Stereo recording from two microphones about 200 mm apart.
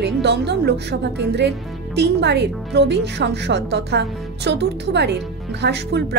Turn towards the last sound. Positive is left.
turn(degrees=-55)  # may be behind; listen again after turning